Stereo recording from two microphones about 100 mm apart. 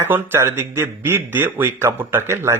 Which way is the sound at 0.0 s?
25° right (ahead or behind).